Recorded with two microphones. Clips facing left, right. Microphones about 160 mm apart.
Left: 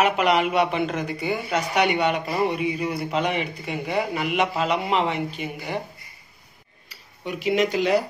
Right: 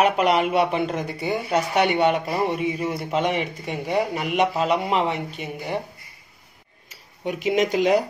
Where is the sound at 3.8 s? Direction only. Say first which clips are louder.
Right 2 dB; 40° right (ahead or behind).